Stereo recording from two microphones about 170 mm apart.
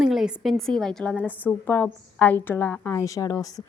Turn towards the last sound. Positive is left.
turn(degrees=20)  # may be behind; listen again after turning